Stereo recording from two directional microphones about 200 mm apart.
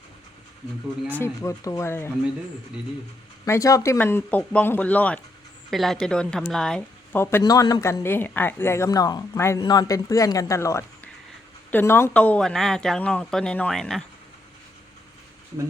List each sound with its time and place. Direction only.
1.2 s speech: 15° left (ahead or behind)
3.4 s speech: 15° left (ahead or behind)